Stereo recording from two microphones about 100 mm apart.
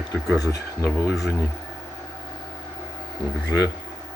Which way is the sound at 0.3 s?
35° left (ahead or behind).